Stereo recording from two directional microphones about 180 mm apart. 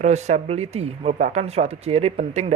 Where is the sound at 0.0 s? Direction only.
40° right (ahead or behind).